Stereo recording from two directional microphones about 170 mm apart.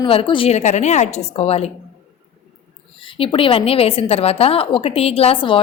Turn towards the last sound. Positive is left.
turn(degrees=30)  # may be behind; listen again after turning